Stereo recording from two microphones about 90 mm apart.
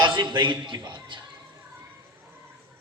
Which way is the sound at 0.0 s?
60° right (ahead or behind).